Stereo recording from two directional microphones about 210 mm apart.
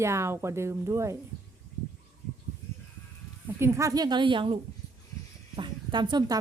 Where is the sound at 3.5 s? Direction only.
10° right (ahead or behind).